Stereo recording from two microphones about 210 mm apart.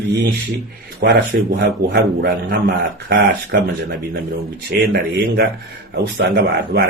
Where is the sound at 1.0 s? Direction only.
50° right (ahead or behind).